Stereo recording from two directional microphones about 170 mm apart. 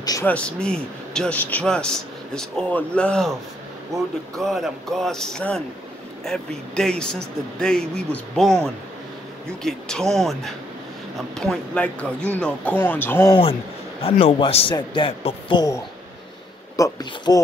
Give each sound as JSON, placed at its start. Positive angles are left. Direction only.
{"t": 0.0, "sound": "speech", "side_deg": 20}
{"t": 0.3, "sound": "a man's voice", "side_deg": 5}
{"t": 3.9, "sound": "speech", "side_deg": -20}
{"t": 4.4, "sound": "a man's voice", "side_deg": 0}
{"t": 13.3, "sound": "speech", "side_deg": 30}